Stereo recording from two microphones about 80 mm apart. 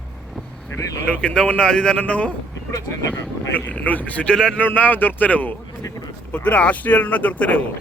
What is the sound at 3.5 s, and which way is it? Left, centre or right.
Speech, centre.